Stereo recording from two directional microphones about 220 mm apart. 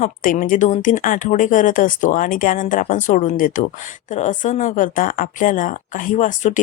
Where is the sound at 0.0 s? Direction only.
35° left (ahead or behind).